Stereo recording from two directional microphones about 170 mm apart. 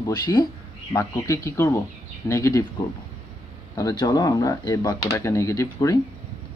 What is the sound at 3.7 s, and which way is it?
Speech, 25° left (ahead or behind).